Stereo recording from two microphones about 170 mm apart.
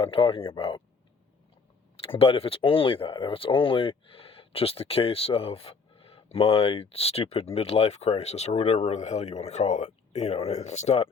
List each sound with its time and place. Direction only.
0.0 s speech: 35° left (ahead or behind)
2.0 s speech: 35° left (ahead or behind)